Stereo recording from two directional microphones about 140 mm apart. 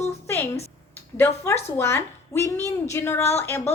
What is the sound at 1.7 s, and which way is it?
A woman's voice, 20° left (ahead or behind).